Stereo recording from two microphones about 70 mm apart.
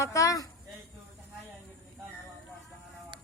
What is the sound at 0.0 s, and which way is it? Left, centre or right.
Speech, left.